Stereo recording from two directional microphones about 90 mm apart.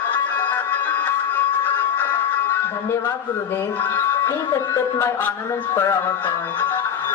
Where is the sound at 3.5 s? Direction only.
30° left (ahead or behind).